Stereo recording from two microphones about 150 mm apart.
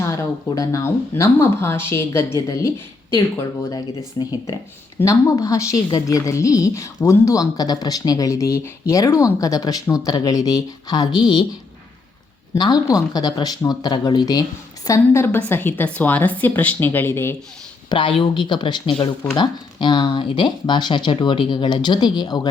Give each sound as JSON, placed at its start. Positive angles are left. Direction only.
{"t": 0.0, "sound": "a woman's voice", "side_deg": 20}
{"t": 12.5, "sound": "a woman's voice", "side_deg": 25}
{"t": 17.8, "sound": "speech", "side_deg": 35}